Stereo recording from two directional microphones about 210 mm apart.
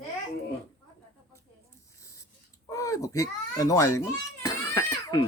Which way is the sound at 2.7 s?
15° left (ahead or behind).